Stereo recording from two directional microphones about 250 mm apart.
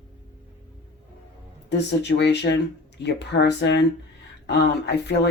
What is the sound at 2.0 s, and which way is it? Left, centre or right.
Speech, left.